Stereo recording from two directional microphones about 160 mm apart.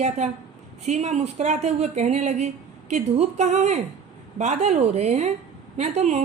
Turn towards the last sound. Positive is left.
turn(degrees=-45)  # may be behind; listen again after turning